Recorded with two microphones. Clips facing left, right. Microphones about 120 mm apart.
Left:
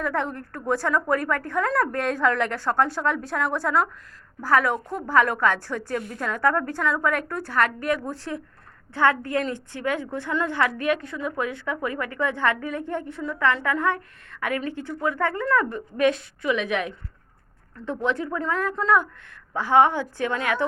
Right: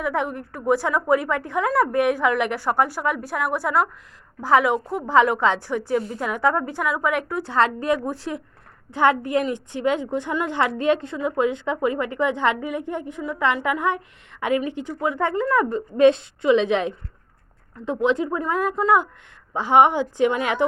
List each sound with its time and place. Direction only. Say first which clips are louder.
0.0 s a woman's voice: right 2 dB; 15° right (ahead or behind)
7.5 s a woman's voice: right 3 dB; 25° right (ahead or behind)
17.7 s a woman's voice: right 5 dB; 15° right (ahead or behind)